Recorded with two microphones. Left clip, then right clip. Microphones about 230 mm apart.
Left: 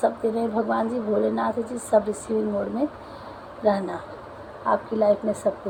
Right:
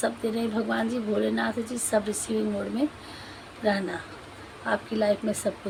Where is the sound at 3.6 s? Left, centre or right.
Right.